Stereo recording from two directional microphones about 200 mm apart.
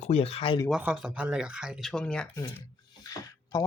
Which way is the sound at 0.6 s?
5° right (ahead or behind).